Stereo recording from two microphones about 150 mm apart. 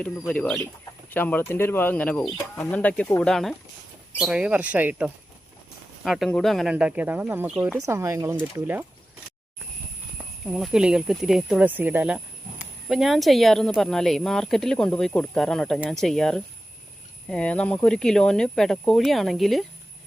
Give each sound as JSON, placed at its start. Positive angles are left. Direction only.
{"t": 0.0, "sound": "speech", "side_deg": 5}
{"t": 7.9, "sound": "speech", "side_deg": -15}
{"t": 10.4, "sound": "speech", "side_deg": 0}